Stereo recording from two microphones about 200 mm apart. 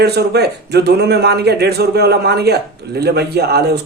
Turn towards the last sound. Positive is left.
turn(degrees=-55)  # may be behind; listen again after turning